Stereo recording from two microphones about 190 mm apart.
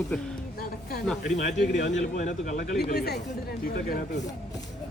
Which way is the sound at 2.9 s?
55° left (ahead or behind).